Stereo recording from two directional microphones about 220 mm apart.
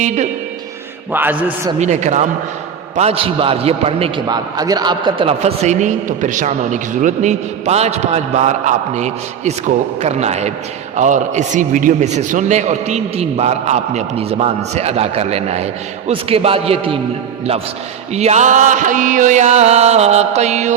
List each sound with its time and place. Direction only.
1.1 s a man's voice: 10° right (ahead or behind)
1.8 s music: 30° right (ahead or behind)
2.9 s a man's voice: 30° right (ahead or behind)
18.1 s music: 30° right (ahead or behind)